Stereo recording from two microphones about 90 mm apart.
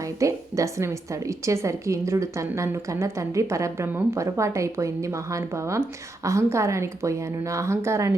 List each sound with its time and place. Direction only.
0.0 s a woman's voice: 35° right (ahead or behind)